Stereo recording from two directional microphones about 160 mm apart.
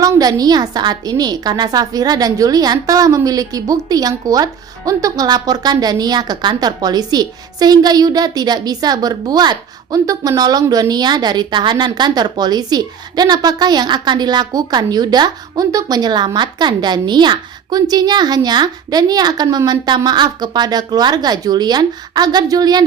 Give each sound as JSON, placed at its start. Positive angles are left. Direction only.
{"t": 0.0, "sound": "a woman's voice", "side_deg": -25}